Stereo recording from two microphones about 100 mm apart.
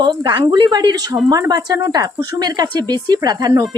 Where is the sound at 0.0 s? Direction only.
45° right (ahead or behind).